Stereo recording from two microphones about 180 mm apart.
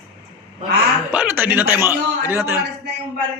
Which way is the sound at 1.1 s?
10° right (ahead or behind).